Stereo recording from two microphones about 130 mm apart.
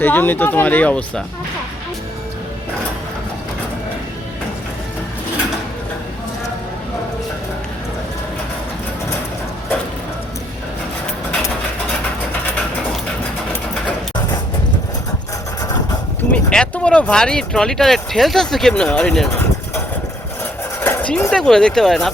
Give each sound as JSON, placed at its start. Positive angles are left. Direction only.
{"t": 0.0, "sound": "speech", "side_deg": 15}
{"t": 16.3, "sound": "speech", "side_deg": 5}
{"t": 20.8, "sound": "a sound", "side_deg": 15}
{"t": 21.2, "sound": "speech", "side_deg": 5}